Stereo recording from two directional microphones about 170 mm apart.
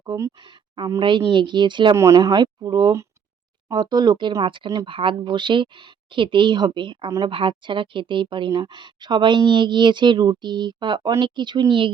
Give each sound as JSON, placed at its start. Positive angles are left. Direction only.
{"t": 0.0, "sound": "speech", "side_deg": -25}